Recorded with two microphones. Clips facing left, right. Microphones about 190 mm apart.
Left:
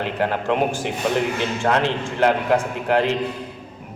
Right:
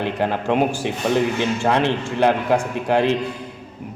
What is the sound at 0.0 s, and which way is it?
Speech, 15° right (ahead or behind).